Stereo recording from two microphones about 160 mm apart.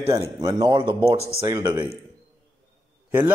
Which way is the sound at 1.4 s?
20° right (ahead or behind).